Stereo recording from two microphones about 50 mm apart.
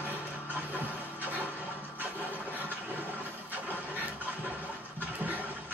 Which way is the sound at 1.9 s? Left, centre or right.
Right.